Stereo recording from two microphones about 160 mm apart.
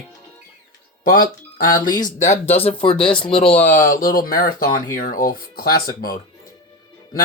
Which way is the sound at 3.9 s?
65° left (ahead or behind).